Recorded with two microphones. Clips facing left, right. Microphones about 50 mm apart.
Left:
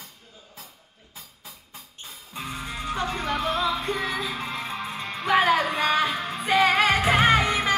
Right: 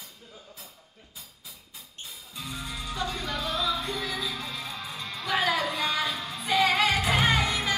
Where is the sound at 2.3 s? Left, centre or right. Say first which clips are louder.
Left 4 dB; left.